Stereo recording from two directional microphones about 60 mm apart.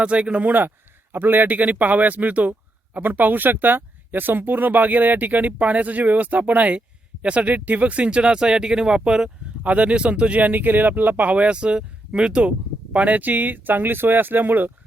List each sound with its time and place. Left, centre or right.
0.0 s speech: centre